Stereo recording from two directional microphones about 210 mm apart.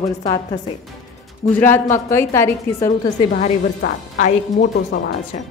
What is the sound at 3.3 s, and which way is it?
A woman's voice, 40° left (ahead or behind).